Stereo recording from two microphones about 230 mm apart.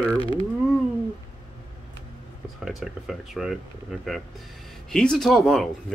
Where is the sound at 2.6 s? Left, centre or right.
Centre.